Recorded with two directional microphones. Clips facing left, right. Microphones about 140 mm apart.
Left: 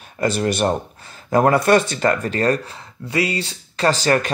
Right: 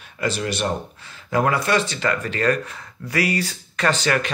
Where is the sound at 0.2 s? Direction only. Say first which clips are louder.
Left 5 dB; 45° left (ahead or behind).